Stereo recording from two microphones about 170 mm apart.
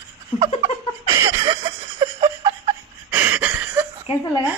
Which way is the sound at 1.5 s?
30° right (ahead or behind).